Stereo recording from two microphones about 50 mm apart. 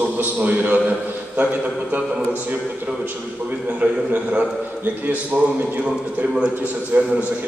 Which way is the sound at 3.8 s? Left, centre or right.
Right.